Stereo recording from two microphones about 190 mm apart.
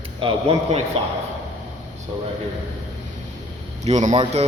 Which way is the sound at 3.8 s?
40° right (ahead or behind).